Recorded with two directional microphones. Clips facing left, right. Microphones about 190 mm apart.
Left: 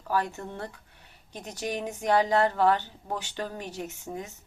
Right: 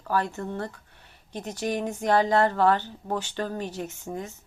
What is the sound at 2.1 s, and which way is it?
Speech, 15° left (ahead or behind).